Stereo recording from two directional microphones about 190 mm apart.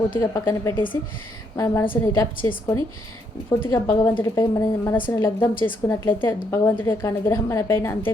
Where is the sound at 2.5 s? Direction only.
20° left (ahead or behind).